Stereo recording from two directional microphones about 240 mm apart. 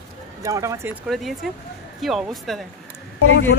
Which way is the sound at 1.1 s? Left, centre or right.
Centre.